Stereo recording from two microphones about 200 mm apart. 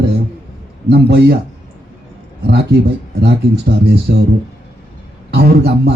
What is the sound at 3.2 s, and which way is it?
Speech, 55° right (ahead or behind).